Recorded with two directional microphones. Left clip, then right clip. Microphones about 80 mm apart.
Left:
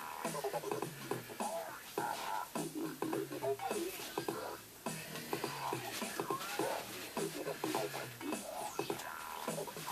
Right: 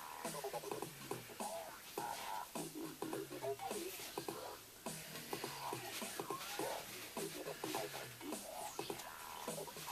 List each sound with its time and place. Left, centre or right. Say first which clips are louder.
0.3 s music: left 6 dB; right